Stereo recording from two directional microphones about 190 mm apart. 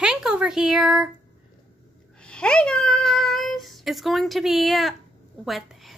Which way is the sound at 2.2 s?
5° left (ahead or behind).